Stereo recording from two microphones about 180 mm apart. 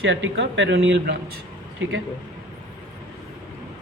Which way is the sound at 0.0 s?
85° right.